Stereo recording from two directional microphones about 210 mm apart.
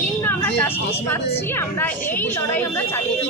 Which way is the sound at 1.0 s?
10° left (ahead or behind).